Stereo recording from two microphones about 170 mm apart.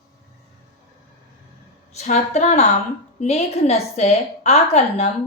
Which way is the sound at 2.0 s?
45° left (ahead or behind).